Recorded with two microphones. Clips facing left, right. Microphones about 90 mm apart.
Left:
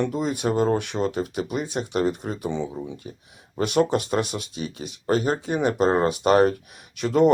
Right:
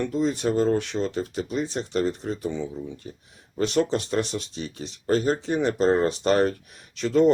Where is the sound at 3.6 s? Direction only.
10° left (ahead or behind).